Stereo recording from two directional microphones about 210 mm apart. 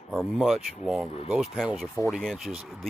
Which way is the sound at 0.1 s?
Centre (ahead or behind).